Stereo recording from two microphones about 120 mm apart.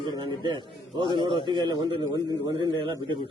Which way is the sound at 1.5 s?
35° right (ahead or behind).